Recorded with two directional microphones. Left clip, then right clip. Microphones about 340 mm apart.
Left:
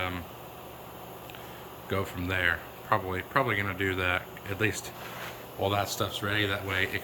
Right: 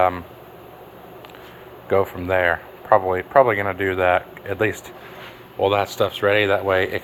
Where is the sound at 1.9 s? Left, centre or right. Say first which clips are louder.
Right 13 dB; centre.